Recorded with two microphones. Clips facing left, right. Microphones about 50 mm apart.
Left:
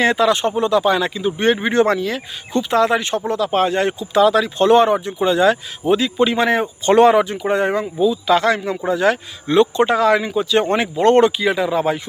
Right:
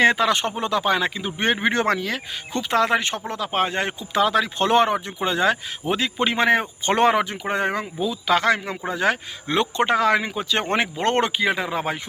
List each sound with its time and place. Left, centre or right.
0.0 s speech: right
8.0 s speech: right